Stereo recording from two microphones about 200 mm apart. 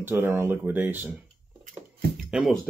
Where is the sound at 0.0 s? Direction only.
10° right (ahead or behind).